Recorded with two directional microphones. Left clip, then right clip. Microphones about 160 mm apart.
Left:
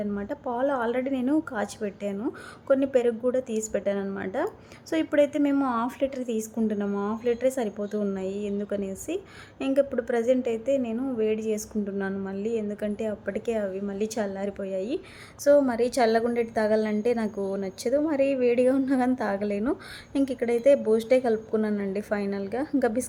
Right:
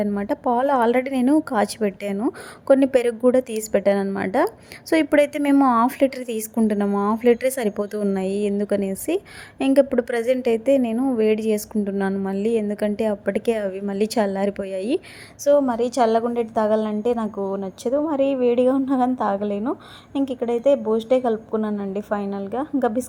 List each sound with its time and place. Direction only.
0.0 s a woman's voice: 35° right (ahead or behind)
15.4 s a woman's voice: 15° right (ahead or behind)